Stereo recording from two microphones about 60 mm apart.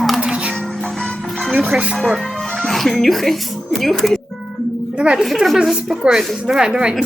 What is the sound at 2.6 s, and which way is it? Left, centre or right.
Speech, centre.